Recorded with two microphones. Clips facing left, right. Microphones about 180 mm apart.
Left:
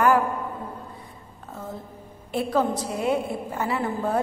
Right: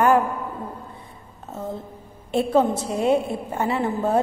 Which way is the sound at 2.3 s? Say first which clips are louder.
Right 4 dB; 25° right (ahead or behind).